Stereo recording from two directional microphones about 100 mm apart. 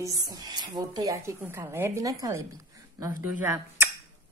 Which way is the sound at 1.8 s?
30° right (ahead or behind).